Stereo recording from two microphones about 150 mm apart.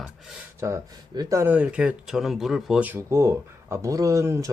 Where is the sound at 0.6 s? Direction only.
20° right (ahead or behind).